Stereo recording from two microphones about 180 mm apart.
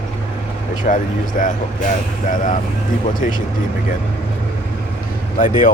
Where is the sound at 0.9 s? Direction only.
45° left (ahead or behind).